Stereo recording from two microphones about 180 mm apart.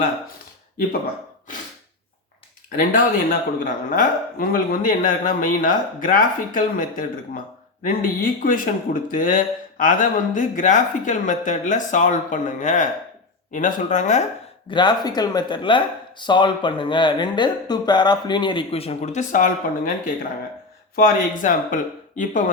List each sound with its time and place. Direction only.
2.7 s speech: 50° left (ahead or behind)
14.7 s speech: 25° left (ahead or behind); by 19.9 s 45° left (ahead or behind)
20.9 s speech: 50° left (ahead or behind)